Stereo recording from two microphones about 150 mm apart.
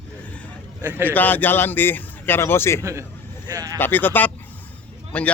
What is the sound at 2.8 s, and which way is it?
Speech, 20° right (ahead or behind).